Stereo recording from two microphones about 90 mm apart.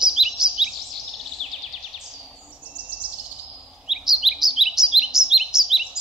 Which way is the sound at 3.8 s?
5° right (ahead or behind).